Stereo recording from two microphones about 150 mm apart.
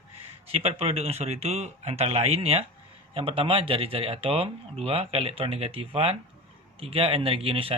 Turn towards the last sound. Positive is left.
turn(degrees=-40)  # may be behind; listen again after turning